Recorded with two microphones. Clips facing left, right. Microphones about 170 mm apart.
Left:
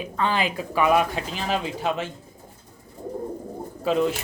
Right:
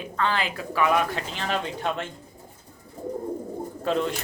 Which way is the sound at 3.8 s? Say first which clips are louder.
Left 4 dB; 5° left (ahead or behind).